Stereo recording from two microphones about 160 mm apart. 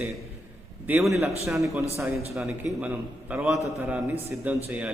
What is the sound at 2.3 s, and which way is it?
A man's voice, 5° right (ahead or behind).